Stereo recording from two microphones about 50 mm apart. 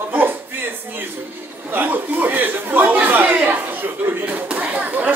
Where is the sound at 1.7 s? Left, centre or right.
Right.